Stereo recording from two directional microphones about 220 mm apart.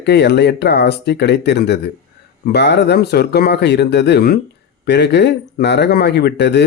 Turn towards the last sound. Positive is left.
turn(degrees=50)  # may be behind; listen again after turning